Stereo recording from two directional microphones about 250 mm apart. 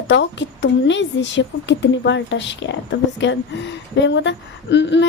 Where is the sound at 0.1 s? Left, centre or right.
Left.